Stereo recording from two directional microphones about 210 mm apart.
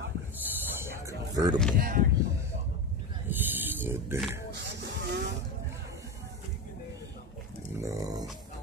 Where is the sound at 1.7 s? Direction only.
40° right (ahead or behind).